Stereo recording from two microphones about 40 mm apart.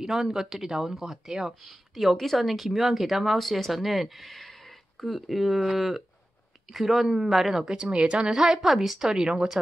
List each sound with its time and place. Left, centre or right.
0.0 s speech: centre
7.1 s a woman's voice: centre
7.7 s a woman's voice: right